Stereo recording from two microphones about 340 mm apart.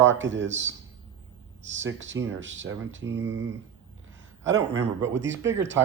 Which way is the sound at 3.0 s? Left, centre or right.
Centre.